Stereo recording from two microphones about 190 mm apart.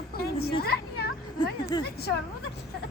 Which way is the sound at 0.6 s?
55° left (ahead or behind).